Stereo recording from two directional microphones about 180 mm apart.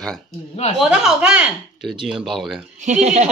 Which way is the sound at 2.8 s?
40° right (ahead or behind).